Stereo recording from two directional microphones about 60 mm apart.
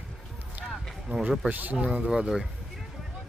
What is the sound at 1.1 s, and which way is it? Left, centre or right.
Speech, right.